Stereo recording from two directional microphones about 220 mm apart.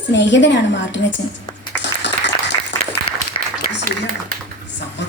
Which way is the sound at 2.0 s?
50° left (ahead or behind).